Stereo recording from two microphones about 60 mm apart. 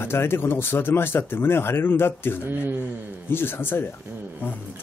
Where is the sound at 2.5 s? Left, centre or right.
Right.